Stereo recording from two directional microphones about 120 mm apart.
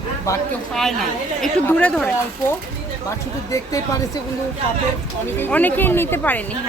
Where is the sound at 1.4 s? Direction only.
5° left (ahead or behind).